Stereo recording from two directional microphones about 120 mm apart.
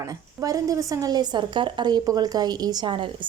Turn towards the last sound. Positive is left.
turn(degrees=-40)  # may be behind; listen again after turning